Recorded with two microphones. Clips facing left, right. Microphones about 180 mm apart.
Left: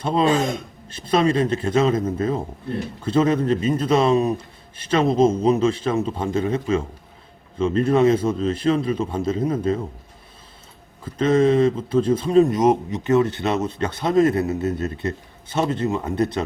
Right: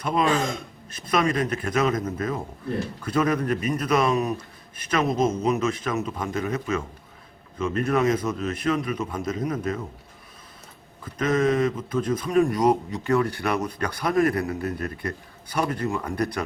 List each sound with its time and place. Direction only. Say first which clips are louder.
0.0 s speech: left 4 dB; 30° left (ahead or behind)
11.0 s speech: left 5 dB; 30° left (ahead or behind)